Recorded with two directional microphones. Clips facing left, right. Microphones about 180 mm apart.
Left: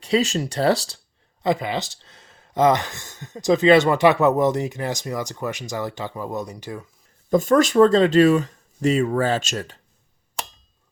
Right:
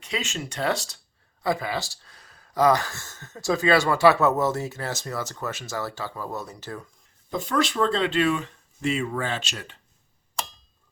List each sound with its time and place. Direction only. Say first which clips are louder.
0.0 s speech: left 11 dB; 35° left (ahead or behind)
1.4 s speech: left 4 dB; 20° left (ahead or behind)
7.3 s speech: left 9 dB; 45° left (ahead or behind)